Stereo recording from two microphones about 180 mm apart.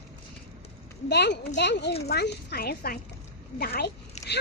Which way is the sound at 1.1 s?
70° left (ahead or behind).